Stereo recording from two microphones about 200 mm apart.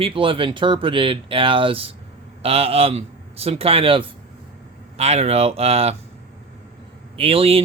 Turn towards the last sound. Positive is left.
turn(degrees=-30)  # may be behind; listen again after turning